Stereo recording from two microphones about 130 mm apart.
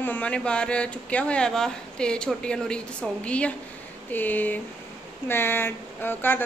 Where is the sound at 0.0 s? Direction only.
10° left (ahead or behind).